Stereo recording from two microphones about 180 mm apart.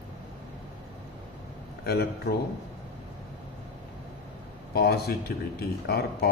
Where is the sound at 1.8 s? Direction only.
60° left (ahead or behind).